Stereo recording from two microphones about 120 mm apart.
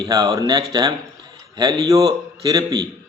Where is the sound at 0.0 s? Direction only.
30° right (ahead or behind).